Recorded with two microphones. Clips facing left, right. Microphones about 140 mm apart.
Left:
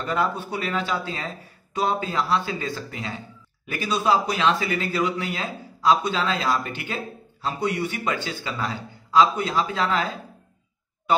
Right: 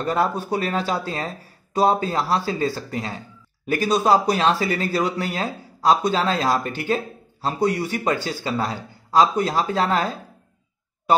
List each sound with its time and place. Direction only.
0.0 s speech: 40° right (ahead or behind)